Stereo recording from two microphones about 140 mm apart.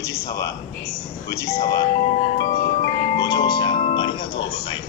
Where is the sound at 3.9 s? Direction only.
35° left (ahead or behind).